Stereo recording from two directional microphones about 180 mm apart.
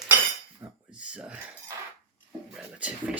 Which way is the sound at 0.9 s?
5° right (ahead or behind).